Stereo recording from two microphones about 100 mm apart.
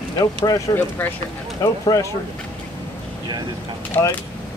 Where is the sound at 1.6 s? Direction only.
35° left (ahead or behind).